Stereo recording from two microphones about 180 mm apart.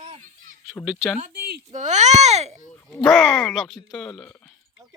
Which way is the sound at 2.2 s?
40° right (ahead or behind).